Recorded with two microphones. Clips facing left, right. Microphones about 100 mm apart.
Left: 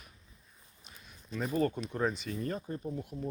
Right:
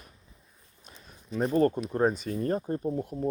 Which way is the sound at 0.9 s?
45° right (ahead or behind).